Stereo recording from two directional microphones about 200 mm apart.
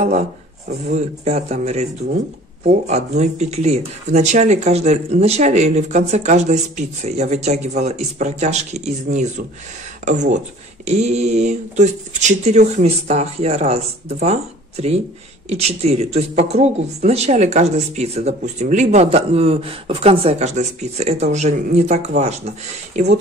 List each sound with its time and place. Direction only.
0.0 s speech: 35° right (ahead or behind)